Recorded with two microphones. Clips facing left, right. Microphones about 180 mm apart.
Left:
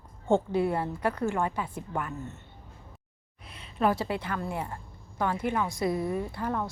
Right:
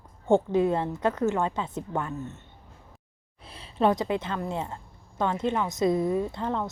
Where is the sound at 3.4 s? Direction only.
30° right (ahead or behind).